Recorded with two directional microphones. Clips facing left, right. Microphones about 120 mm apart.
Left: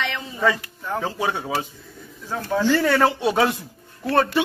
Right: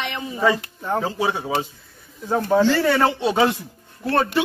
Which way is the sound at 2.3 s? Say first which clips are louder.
Right 6 dB; 20° right (ahead or behind).